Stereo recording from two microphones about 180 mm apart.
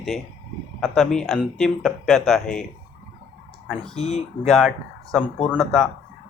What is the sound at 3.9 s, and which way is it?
Speech, 35° left (ahead or behind).